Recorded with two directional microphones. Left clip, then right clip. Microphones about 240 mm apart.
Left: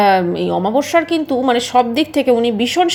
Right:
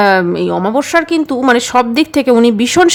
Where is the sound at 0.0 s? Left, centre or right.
Centre.